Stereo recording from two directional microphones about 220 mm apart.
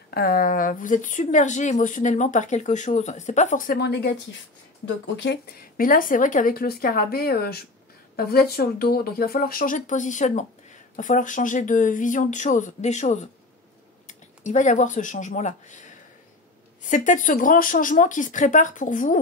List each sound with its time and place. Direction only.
0.1 s speech: 40° left (ahead or behind)
16.9 s speech: 35° left (ahead or behind)